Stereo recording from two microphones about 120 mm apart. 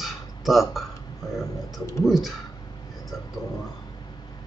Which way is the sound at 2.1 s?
Centre (ahead or behind).